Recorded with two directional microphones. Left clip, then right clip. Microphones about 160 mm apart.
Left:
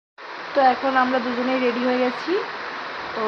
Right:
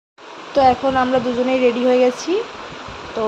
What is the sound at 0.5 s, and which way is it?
Speech, 35° right (ahead or behind).